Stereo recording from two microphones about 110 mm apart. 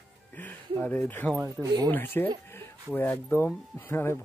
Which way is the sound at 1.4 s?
30° right (ahead or behind).